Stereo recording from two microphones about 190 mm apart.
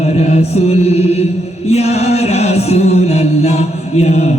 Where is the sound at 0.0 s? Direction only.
35° left (ahead or behind).